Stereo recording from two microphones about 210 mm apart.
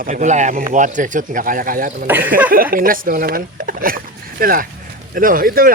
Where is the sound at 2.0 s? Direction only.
10° right (ahead or behind).